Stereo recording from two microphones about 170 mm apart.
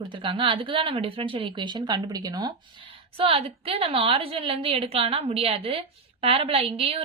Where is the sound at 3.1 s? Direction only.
35° right (ahead or behind).